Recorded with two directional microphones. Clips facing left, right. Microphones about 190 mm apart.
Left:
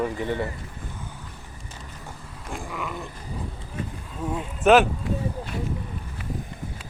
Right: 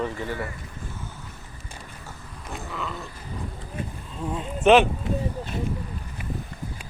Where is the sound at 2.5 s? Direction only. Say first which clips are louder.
Left 1 dB; 10° left (ahead or behind).